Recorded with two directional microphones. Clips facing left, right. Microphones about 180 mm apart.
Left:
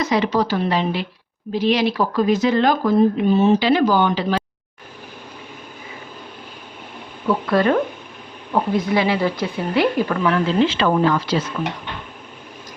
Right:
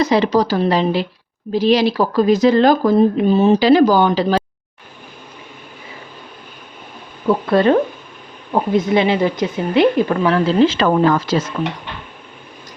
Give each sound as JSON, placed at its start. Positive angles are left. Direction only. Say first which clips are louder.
{"t": 0.0, "sound": "speech", "louder": "right 4 dB", "side_deg": -35}
{"t": 7.3, "sound": "speech", "louder": "right 4 dB", "side_deg": -25}
{"t": 10.3, "sound": "speech", "louder": "right 5 dB", "side_deg": -40}